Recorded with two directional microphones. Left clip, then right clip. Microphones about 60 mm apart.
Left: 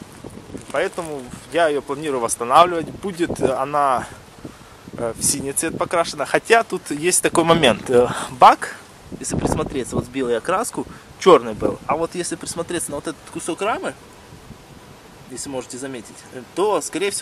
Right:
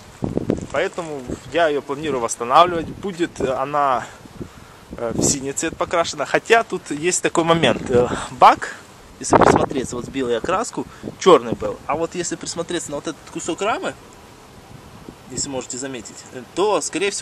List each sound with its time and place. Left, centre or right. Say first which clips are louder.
0.7 s speech: even; left
9.2 s speech: right 10 dB; centre
15.3 s speech: right 2 dB; centre